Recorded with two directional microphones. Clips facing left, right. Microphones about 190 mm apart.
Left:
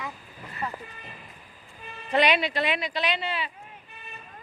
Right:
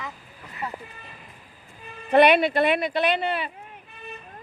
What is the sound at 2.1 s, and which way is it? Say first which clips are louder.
Speech: right 7 dB; 55° right (ahead or behind).